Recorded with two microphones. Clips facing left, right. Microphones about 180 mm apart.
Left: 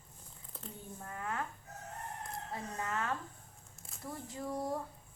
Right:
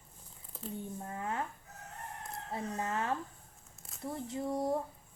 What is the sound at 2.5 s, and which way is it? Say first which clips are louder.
Speech: right 4 dB; 25° right (ahead or behind).